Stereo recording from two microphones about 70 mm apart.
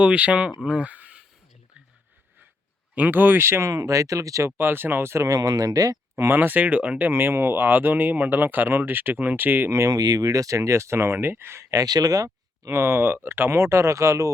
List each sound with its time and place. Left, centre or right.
0.0 s speech: centre
2.9 s speech: right
3.7 s speech: right
4.5 s speech: right
5.3 s speech: right
6.1 s speech: right
7.1 s speech: right
9.9 s speech: right
11.7 s speech: right
12.6 s speech: right